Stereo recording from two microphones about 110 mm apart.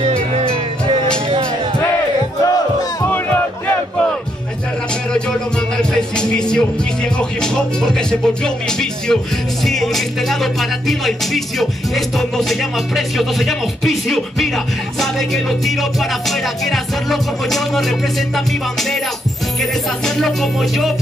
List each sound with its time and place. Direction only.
0.0 s music: 70° right (ahead or behind)
2.4 s battle cry: 30° left (ahead or behind)
3.1 s music: 15° left (ahead or behind)
5.8 s speech: 5° left (ahead or behind)
7.2 s music: 5° left (ahead or behind)
8.6 s speech: 5° left (ahead or behind)
9.7 s music: centre (ahead or behind)
20.2 s music: centre (ahead or behind)